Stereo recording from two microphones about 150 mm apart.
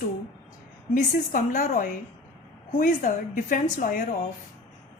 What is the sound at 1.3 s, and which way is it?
A woman's voice, 60° left (ahead or behind).